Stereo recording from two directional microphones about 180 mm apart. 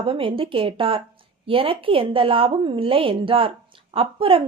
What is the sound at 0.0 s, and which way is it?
A woman's voice, 30° right (ahead or behind).